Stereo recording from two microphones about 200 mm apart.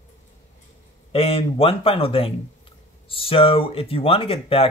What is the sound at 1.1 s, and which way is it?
Speech, 30° left (ahead or behind).